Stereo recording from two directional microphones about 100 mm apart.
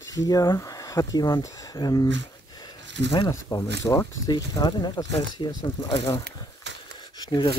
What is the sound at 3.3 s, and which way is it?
Speech, 35° left (ahead or behind).